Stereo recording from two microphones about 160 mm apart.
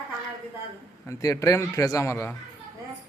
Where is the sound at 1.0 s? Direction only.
20° left (ahead or behind).